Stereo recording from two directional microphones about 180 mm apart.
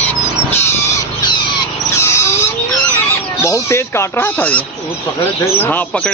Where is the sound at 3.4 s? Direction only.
15° left (ahead or behind).